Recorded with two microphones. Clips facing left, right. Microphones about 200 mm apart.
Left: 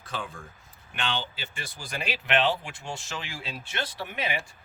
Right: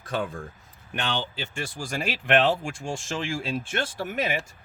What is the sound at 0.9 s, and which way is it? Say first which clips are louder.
Speech: right 3 dB; 40° right (ahead or behind).